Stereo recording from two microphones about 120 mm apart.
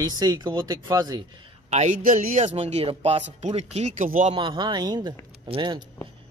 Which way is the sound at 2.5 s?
60° right (ahead or behind).